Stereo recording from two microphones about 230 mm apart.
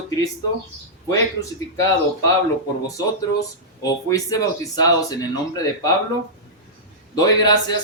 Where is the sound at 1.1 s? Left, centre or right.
Centre.